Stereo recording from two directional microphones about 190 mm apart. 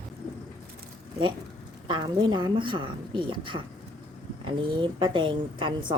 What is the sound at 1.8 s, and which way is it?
A woman's voice, 25° right (ahead or behind).